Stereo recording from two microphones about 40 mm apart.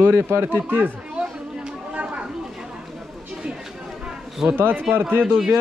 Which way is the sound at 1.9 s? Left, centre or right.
Right.